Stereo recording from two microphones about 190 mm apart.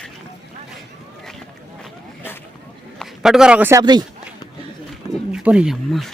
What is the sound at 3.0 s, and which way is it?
A man's voice, centre (ahead or behind).